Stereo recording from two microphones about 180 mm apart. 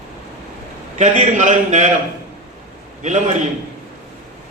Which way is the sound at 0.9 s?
40° right (ahead or behind).